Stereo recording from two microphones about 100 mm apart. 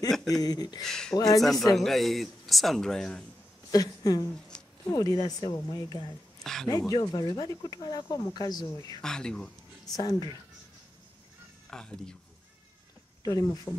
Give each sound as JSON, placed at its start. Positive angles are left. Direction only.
{"t": 0.3, "sound": "speech", "side_deg": 40}
{"t": 0.8, "sound": "speech", "side_deg": 5}
{"t": 1.1, "sound": "speech", "side_deg": 35}
{"t": 1.4, "sound": "speech", "side_deg": 0}
{"t": 3.7, "sound": "speech", "side_deg": 40}
{"t": 6.4, "sound": "speech", "side_deg": 5}
{"t": 6.9, "sound": "speech", "side_deg": 40}
{"t": 9.0, "sound": "speech", "side_deg": 5}
{"t": 9.9, "sound": "speech", "side_deg": 40}
{"t": 11.7, "sound": "speech", "side_deg": 5}
{"t": 13.2, "sound": "speech", "side_deg": 35}